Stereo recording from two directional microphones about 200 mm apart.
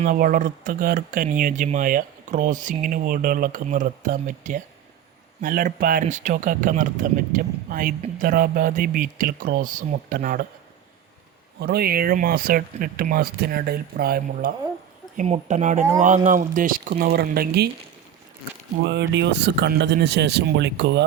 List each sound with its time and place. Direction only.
0.0 s speech: 45° right (ahead or behind)
11.6 s speech: 50° right (ahead or behind)
15.1 s speech: 35° right (ahead or behind)
18.8 s speech: 60° right (ahead or behind)